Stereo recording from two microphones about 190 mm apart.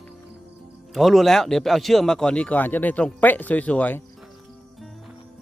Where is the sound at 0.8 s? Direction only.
Centre (ahead or behind).